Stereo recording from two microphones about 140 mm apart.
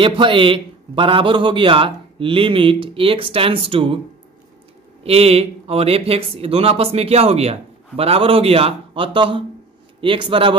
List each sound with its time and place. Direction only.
0.0 s a man's voice: 35° right (ahead or behind)
5.0 s a man's voice: 45° right (ahead or behind)